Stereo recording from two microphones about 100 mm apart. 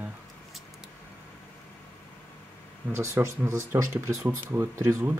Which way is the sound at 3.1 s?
25° right (ahead or behind).